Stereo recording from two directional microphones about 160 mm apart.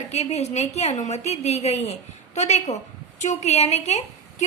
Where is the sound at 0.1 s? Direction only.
45° left (ahead or behind).